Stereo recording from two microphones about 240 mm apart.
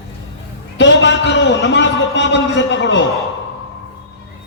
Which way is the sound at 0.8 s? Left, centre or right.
Left.